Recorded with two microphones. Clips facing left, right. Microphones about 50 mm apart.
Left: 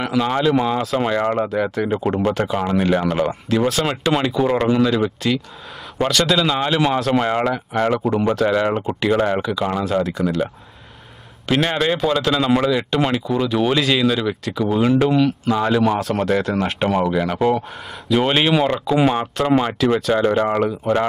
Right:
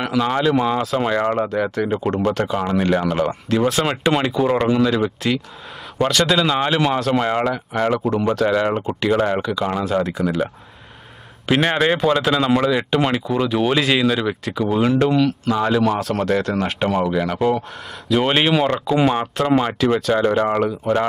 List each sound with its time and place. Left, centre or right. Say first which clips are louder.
0.0 s speech: even; centre
18.2 s speech: even; centre